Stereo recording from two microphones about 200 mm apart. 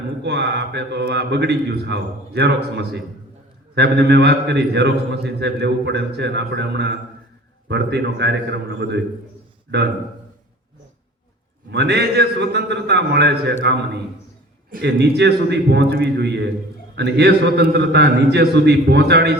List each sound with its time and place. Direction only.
0.2 s a man's voice: 55° right (ahead or behind)
11.7 s a man's voice: 55° right (ahead or behind)